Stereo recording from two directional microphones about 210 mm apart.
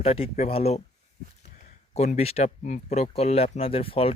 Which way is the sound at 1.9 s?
30° left (ahead or behind).